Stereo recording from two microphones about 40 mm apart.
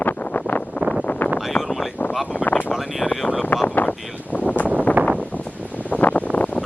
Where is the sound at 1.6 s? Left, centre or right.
Centre.